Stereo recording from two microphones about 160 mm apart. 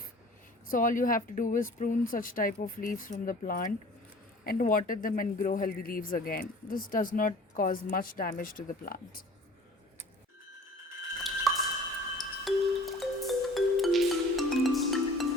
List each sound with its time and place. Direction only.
0.7 s speech: 55° left (ahead or behind)
11.5 s a sound: centre (ahead or behind)
12.1 s music: centre (ahead or behind)